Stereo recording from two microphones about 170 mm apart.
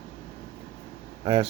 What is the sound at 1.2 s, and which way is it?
Speech, 35° right (ahead or behind).